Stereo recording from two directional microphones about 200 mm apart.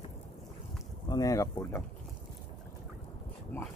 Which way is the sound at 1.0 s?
20° left (ahead or behind).